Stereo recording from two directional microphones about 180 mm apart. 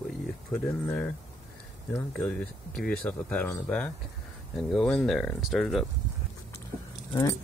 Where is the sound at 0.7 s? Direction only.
5° left (ahead or behind).